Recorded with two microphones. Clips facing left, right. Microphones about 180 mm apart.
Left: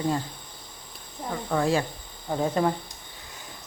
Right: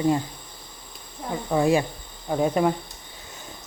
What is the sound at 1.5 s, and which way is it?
Speech, 15° right (ahead or behind).